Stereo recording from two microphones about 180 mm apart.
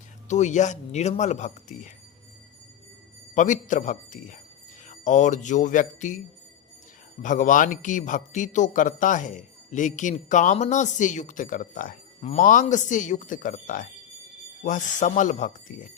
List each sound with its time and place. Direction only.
0.3 s speech: 40° left (ahead or behind)
3.3 s a man's voice: 45° left (ahead or behind)
7.2 s a man's voice: 45° left (ahead or behind)